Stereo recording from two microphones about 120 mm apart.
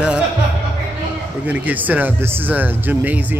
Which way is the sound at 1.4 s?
15° right (ahead or behind).